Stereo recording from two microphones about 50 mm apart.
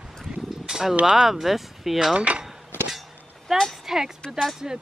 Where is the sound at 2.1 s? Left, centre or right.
Right.